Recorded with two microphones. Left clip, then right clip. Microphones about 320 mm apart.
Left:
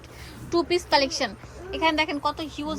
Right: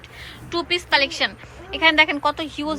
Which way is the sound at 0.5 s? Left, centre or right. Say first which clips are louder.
Right 2 dB; centre.